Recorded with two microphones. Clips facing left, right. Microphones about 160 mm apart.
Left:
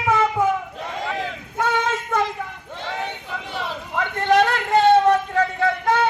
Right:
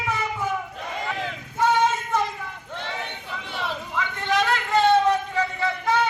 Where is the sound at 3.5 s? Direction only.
55° left (ahead or behind).